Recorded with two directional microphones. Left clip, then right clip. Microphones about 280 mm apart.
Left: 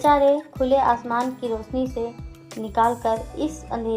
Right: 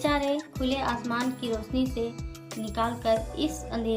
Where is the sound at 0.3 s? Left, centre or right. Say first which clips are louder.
Left 10 dB; centre.